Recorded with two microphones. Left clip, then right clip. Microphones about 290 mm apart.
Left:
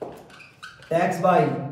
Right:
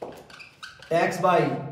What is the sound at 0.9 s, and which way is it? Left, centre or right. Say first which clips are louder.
Speech: left 1 dB; centre.